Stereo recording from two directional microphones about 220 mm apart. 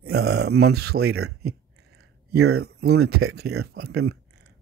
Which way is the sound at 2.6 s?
50° right (ahead or behind).